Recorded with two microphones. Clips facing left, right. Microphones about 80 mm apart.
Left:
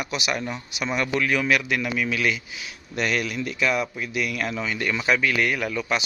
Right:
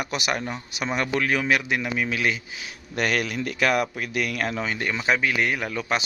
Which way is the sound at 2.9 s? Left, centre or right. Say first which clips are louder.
Right 1 dB; right.